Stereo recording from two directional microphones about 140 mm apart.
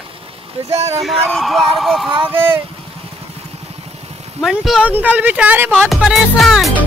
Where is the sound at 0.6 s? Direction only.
50° right (ahead or behind).